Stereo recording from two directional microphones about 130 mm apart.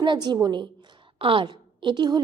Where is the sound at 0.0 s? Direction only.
35° right (ahead or behind).